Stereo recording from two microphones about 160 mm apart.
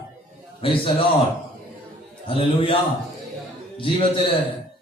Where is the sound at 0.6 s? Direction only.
35° left (ahead or behind).